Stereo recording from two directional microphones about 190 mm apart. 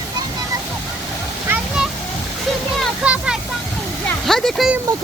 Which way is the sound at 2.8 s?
5° right (ahead or behind).